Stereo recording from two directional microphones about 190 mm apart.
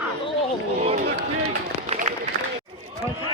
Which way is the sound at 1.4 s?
35° right (ahead or behind).